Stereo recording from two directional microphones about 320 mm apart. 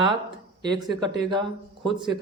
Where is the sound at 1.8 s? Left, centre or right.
Centre.